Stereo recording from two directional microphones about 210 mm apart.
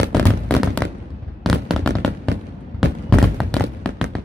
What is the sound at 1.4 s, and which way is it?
Fireworks, centre (ahead or behind).